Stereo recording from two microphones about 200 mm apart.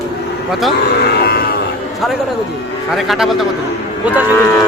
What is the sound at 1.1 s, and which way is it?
Cattle, 50° left (ahead or behind).